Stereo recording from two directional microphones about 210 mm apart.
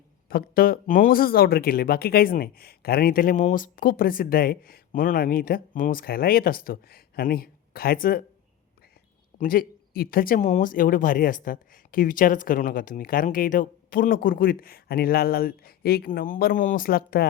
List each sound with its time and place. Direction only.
0.3 s speech: 45° left (ahead or behind)
9.4 s speech: 45° left (ahead or behind)